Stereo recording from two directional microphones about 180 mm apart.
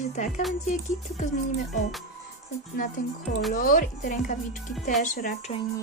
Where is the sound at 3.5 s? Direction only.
50° left (ahead or behind).